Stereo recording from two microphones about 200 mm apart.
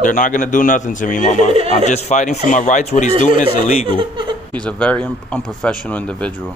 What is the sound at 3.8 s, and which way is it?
Speech, 25° right (ahead or behind).